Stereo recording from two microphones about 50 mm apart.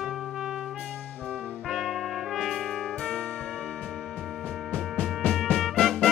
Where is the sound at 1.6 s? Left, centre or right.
Centre.